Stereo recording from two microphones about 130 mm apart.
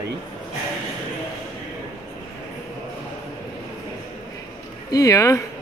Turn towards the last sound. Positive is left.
turn(degrees=25)  # may be behind; listen again after turning